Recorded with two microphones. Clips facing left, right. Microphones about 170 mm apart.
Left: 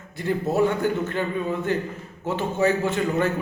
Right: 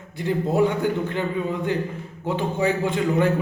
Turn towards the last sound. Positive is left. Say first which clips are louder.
# right 2 dB
turn(degrees=-15)  # may be behind; listen again after turning